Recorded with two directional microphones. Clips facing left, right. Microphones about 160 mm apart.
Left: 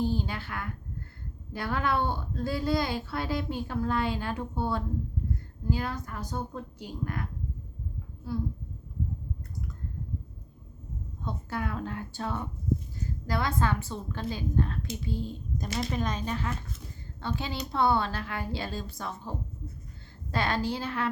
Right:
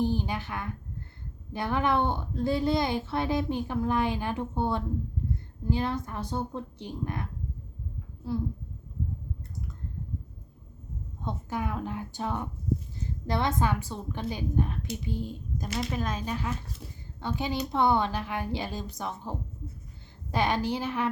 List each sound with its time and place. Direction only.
0.0 s a woman's voice: 15° right (ahead or behind)
11.3 s a woman's voice: 15° right (ahead or behind)